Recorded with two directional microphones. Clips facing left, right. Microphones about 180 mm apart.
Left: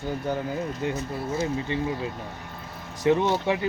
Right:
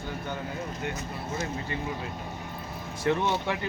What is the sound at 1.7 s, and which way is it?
Speech, 25° left (ahead or behind).